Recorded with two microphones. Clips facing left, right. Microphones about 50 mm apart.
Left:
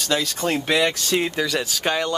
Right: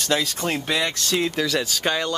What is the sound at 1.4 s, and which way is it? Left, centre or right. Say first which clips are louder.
Speech: even; centre.